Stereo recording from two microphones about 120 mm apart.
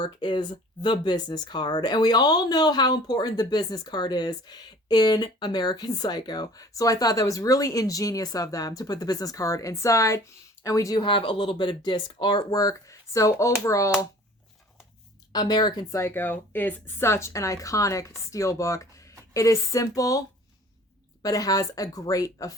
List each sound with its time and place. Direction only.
0.0 s speech: 40° left (ahead or behind)
11.0 s a woman's voice: 45° left (ahead or behind); by 13.9 s 25° left (ahead or behind)
15.3 s a woman's voice: 35° left (ahead or behind)